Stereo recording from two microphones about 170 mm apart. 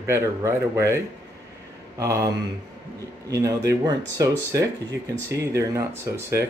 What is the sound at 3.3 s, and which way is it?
Speech, 20° right (ahead or behind).